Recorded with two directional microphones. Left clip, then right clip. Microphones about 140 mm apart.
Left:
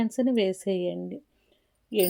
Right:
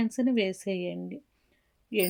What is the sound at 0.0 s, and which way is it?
Speech, 10° right (ahead or behind).